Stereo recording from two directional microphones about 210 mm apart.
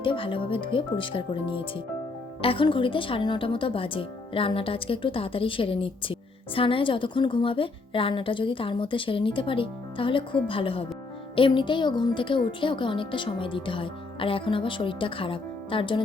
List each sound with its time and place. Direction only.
0.0 s speech: 25° left (ahead or behind)